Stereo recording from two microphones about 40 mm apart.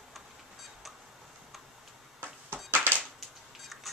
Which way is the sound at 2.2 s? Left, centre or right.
Right.